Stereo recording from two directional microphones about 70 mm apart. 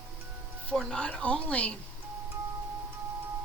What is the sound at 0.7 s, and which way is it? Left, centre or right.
Speech, centre.